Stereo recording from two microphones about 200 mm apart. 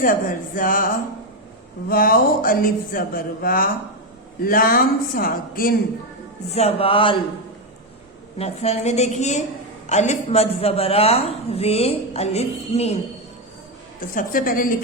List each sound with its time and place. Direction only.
0.0 s speech: 45° left (ahead or behind)
1.9 s speech: 45° left (ahead or behind)
6.5 s speech: 30° left (ahead or behind)
8.4 s a woman's voice: 30° left (ahead or behind)
14.0 s speech: 45° left (ahead or behind)